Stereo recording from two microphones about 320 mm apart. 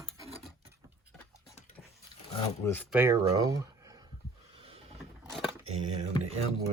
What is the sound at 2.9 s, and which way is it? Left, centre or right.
Speech, centre.